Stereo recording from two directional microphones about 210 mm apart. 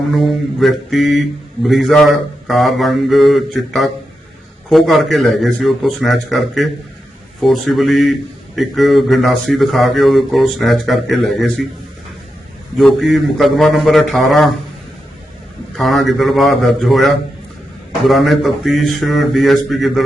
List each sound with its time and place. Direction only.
0.2 s speech: centre (ahead or behind)
12.7 s speech: centre (ahead or behind)
15.7 s speech: centre (ahead or behind)